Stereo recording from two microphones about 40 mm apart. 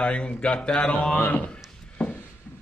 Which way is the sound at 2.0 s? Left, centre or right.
Left.